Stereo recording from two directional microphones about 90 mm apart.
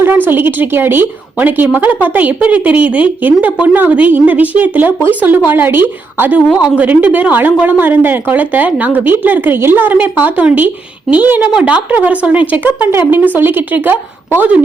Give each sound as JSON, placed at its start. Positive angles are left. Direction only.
{"t": 0.3, "sound": "a woman's voice", "side_deg": -20}